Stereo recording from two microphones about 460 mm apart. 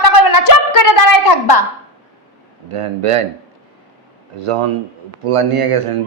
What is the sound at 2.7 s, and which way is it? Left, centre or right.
Speech, right.